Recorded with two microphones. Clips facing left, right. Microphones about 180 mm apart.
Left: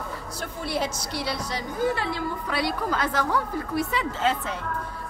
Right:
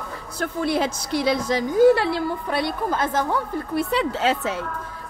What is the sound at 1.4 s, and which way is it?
Speech, 90° right.